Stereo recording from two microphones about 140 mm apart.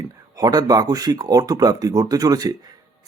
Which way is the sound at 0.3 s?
25° right (ahead or behind).